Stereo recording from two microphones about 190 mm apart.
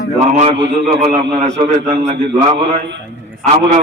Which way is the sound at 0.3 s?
30° right (ahead or behind).